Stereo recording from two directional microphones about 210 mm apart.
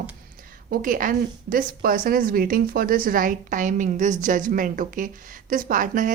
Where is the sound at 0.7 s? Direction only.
40° right (ahead or behind).